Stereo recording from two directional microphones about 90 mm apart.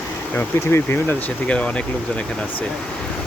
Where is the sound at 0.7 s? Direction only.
25° left (ahead or behind).